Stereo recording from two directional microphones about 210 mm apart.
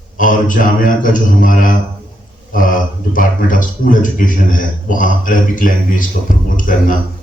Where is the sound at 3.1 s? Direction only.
40° left (ahead or behind).